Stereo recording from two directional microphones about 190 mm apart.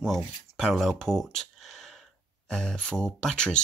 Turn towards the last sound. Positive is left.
turn(degrees=5)  # may be behind; listen again after turning